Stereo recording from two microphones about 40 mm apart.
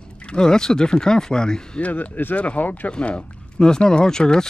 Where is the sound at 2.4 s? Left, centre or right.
Left.